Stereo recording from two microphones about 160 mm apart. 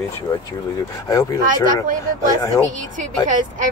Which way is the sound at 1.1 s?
20° left (ahead or behind).